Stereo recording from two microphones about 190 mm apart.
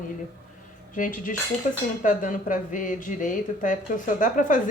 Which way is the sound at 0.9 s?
45° left (ahead or behind).